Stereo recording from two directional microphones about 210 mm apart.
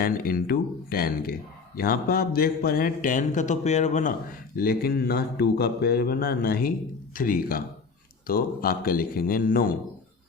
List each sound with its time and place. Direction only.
0.0 s speech: 45° left (ahead or behind)